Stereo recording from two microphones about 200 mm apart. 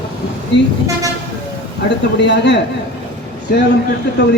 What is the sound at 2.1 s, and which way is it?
Speech, 60° left (ahead or behind).